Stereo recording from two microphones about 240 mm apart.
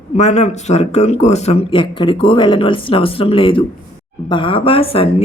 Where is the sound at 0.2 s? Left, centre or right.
Left.